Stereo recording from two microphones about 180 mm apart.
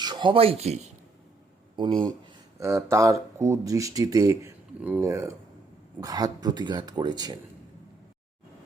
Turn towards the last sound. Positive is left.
turn(degrees=-25)  # may be behind; listen again after turning